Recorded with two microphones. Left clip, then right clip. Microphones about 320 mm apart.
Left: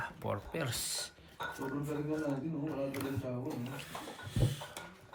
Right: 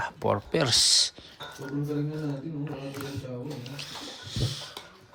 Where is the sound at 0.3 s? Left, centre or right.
Centre.